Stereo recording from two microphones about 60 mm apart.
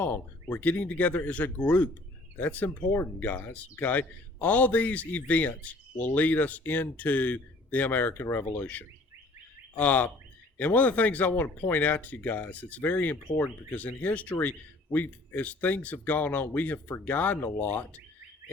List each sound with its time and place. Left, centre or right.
0.5 s a man's voice: left